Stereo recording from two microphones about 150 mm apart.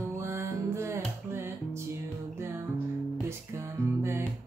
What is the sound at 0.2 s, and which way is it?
Music, 15° right (ahead or behind).